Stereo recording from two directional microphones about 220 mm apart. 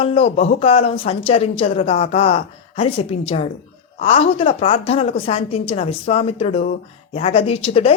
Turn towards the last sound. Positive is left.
turn(degrees=25)  # may be behind; listen again after turning